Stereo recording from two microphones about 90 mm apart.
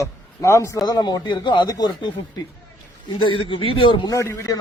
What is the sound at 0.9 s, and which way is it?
Speech, 50° left (ahead or behind).